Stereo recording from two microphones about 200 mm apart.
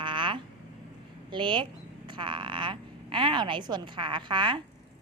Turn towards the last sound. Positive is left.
turn(degrees=-25)  # may be behind; listen again after turning